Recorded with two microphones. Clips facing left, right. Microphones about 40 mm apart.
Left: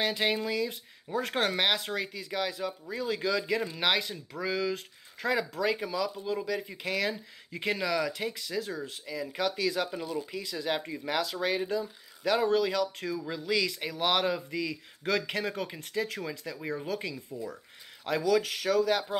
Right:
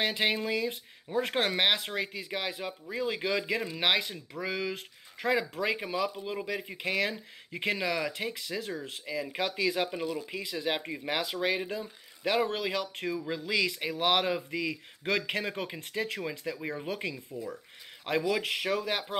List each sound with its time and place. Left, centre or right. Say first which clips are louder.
0.0 s speech: even; right